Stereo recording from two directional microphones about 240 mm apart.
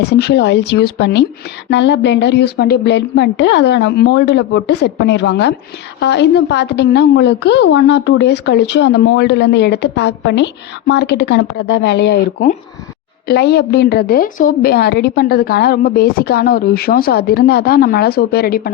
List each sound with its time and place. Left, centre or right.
0.0 s a woman's voice: left